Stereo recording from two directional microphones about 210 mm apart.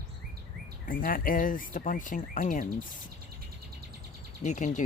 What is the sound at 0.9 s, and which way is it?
Speech, 40° left (ahead or behind).